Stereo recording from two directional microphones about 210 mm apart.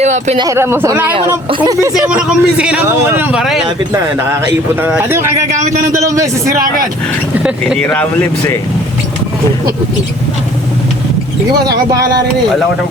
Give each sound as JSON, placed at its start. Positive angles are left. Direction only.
{"t": 0.0, "sound": "speech", "side_deg": -35}
{"t": 0.3, "sound": "speech", "side_deg": -15}
{"t": 1.5, "sound": "speech", "side_deg": -20}
{"t": 1.9, "sound": "speech", "side_deg": -5}
{"t": 7.8, "sound": "speech", "side_deg": 5}
{"t": 11.9, "sound": "speech", "side_deg": -20}